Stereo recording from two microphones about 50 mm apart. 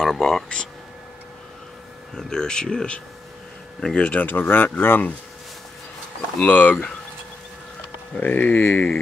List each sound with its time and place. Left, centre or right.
0.0 s speech: centre
2.1 s speech: centre
4.2 s speech: left
6.4 s speech: left
8.2 s speech: left